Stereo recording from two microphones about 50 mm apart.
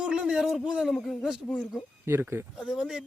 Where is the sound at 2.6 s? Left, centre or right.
Centre.